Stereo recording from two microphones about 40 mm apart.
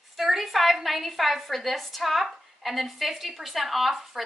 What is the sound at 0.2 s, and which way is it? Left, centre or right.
A woman's voice, centre.